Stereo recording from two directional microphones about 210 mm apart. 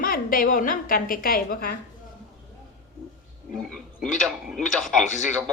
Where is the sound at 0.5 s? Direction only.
40° left (ahead or behind).